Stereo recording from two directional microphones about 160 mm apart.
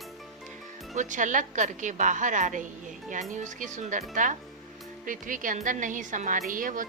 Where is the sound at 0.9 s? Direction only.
50° right (ahead or behind).